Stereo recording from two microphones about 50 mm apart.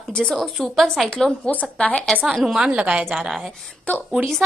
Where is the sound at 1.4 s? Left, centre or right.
Centre.